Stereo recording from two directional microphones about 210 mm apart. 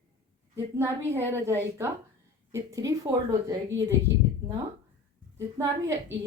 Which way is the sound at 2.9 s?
15° right (ahead or behind).